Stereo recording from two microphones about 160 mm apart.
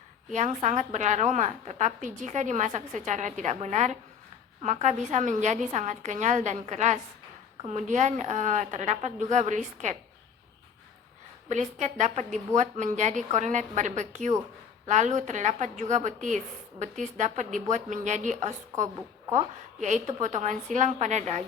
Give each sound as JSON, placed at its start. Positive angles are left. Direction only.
{"t": 0.3, "sound": "a woman's voice", "side_deg": -50}
{"t": 11.8, "sound": "a woman's voice", "side_deg": -45}